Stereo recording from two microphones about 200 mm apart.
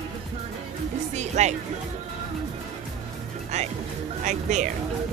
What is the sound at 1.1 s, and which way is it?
Speech, 35° right (ahead or behind).